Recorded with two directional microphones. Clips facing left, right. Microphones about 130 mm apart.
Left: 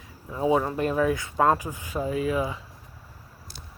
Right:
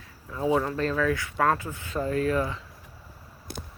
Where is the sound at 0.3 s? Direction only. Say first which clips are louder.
Left 2 dB; 20° left (ahead or behind).